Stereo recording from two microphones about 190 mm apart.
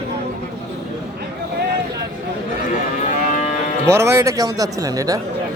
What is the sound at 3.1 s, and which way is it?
Moo, 45° left (ahead or behind).